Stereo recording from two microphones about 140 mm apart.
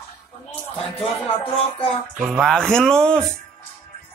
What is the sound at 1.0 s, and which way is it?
Speech, 40° left (ahead or behind).